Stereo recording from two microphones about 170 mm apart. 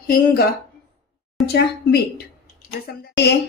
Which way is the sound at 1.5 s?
70° left (ahead or behind).